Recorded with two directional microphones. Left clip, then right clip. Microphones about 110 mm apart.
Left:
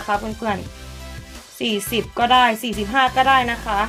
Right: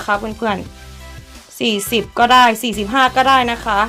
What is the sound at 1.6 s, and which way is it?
Speech, 90° right.